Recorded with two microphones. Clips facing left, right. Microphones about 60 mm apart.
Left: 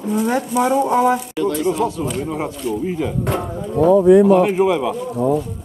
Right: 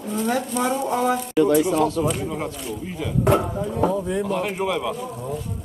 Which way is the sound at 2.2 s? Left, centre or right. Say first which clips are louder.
Left 5 dB; centre.